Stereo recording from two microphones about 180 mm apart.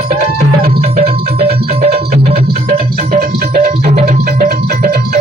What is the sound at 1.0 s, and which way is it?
Music, 35° right (ahead or behind).